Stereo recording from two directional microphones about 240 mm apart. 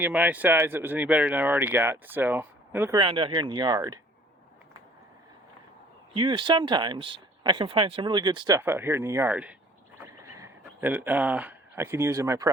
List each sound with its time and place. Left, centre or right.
0.0 s speech: centre
3.0 s speech: right
6.1 s speech: centre
10.1 s a sound: centre